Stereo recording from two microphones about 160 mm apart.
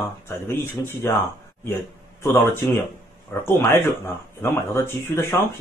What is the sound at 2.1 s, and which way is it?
A man's voice, 15° left (ahead or behind).